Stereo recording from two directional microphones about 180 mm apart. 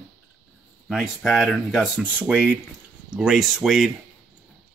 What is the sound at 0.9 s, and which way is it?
Speech, centre (ahead or behind).